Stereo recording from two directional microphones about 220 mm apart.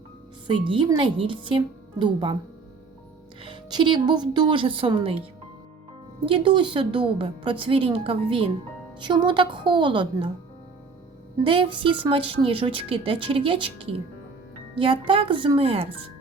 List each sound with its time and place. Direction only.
0.4 s a woman's voice: 20° right (ahead or behind)
3.4 s a woman's voice: 20° right (ahead or behind)
6.2 s a woman's voice: 20° right (ahead or behind)
11.4 s a woman's voice: 25° right (ahead or behind)